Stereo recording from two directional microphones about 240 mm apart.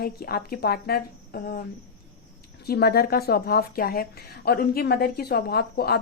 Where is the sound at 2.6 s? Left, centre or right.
Left.